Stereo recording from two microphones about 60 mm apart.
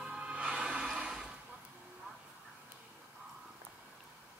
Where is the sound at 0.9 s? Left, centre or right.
Centre.